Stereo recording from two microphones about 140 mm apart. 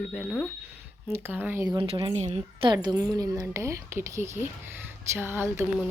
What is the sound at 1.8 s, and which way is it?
Speech, 45° right (ahead or behind).